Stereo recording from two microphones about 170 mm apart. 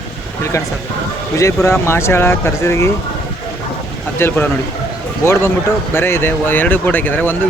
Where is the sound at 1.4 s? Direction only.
15° left (ahead or behind).